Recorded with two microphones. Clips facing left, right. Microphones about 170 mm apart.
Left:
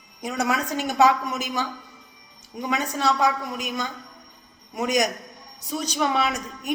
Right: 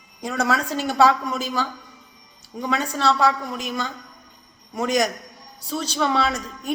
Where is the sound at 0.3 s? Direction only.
15° left (ahead or behind).